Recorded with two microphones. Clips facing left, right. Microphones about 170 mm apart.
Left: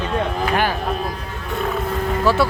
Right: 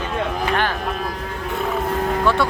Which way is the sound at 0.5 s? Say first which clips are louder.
Left 2 dB; 10° left (ahead or behind).